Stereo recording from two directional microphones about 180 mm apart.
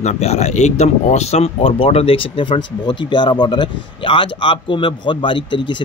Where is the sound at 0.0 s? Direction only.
40° left (ahead or behind).